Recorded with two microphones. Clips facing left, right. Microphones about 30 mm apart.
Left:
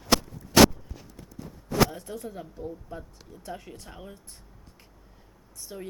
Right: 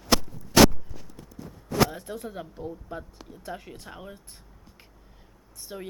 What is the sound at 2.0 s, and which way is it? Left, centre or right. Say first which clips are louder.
Speech: right 1 dB; right.